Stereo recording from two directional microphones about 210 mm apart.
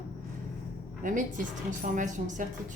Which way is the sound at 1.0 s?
35° right (ahead or behind).